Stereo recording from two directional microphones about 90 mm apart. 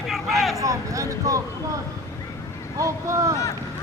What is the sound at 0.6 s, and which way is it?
Speech, 35° right (ahead or behind).